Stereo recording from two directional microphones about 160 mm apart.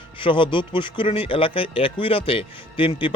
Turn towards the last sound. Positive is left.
turn(degrees=30)  # may be behind; listen again after turning